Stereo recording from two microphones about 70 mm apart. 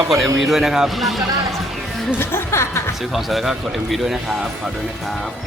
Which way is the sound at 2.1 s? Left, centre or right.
Left.